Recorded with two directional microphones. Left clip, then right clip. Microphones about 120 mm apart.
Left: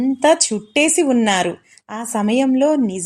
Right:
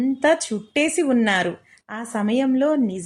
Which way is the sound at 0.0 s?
35° left (ahead or behind).